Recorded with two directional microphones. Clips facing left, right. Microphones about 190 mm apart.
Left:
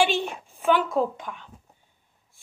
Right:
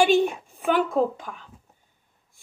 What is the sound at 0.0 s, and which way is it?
A woman's voice, 45° right (ahead or behind).